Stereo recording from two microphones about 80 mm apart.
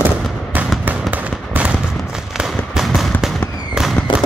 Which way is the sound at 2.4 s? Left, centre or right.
Centre.